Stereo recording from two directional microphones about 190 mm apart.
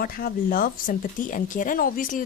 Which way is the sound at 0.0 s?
50° left (ahead or behind).